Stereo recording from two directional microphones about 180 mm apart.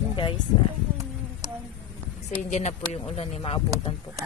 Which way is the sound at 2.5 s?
40° left (ahead or behind).